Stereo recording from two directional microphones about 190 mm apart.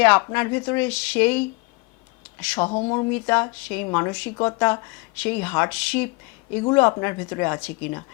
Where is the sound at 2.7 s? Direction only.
25° left (ahead or behind).